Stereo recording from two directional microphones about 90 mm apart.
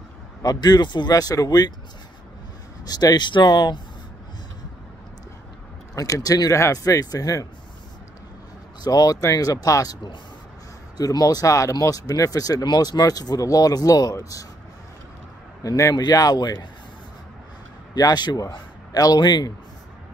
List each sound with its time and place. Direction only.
0.4 s speech: 45° left (ahead or behind)
2.8 s speech: 45° left (ahead or behind)
5.9 s speech: 40° left (ahead or behind)
8.8 s speech: 45° left (ahead or behind)
11.0 s speech: 45° left (ahead or behind)
15.6 s speech: 40° left (ahead or behind)
17.9 s a man's voice: 50° left (ahead or behind)